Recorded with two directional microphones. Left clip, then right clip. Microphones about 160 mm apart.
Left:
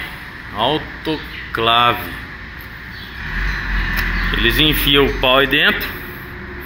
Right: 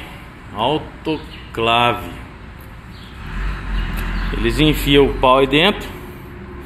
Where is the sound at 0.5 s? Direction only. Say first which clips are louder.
Left 1 dB; 15° right (ahead or behind).